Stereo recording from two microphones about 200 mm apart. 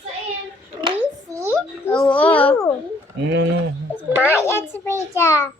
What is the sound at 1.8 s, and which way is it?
Speech, 5° left (ahead or behind).